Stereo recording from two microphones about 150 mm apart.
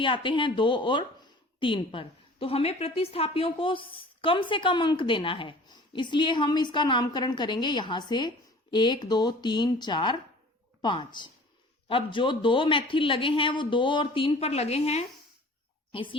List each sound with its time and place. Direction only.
0.0 s a woman's voice: 35° left (ahead or behind)
15.9 s speech: 35° left (ahead or behind)